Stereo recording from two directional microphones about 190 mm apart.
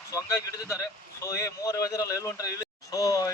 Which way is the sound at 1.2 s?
15° left (ahead or behind).